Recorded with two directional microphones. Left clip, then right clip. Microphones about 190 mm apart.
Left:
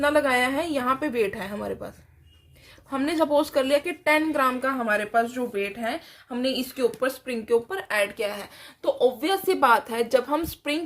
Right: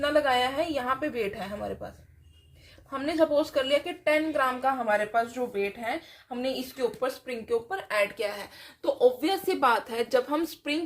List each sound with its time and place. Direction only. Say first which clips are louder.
0.0 s speech: left 3 dB; 50° left (ahead or behind)
2.9 s speech: left 2 dB; 50° left (ahead or behind); by 10.8 s 30° left (ahead or behind)